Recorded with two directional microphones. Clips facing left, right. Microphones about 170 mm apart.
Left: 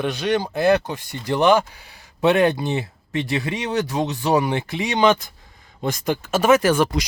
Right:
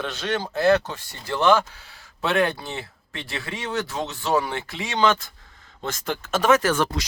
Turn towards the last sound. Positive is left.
turn(degrees=10)  # may be behind; listen again after turning